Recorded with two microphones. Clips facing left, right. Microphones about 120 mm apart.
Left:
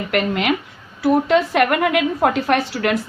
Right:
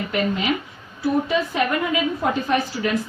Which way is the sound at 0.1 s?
80° left.